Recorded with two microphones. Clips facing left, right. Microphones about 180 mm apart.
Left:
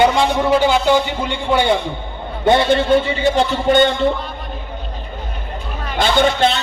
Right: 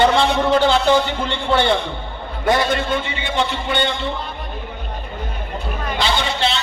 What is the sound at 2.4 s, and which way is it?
A man's voice, 30° left (ahead or behind).